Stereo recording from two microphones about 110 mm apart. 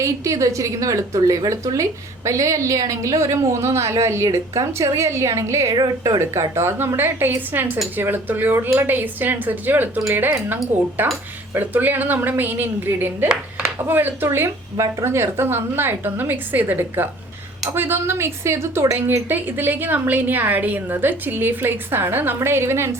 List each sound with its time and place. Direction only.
0.0 s a woman's voice: 30° right (ahead or behind)
5.7 s speech: 40° right (ahead or behind)
6.1 s a woman's voice: 25° right (ahead or behind)